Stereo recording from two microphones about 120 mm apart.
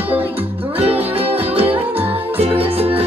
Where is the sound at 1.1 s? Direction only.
55° right (ahead or behind).